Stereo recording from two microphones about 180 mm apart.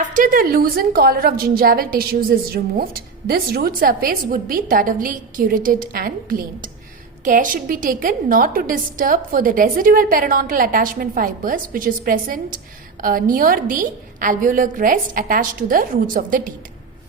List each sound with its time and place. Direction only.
0.1 s a woman's voice: 50° right (ahead or behind)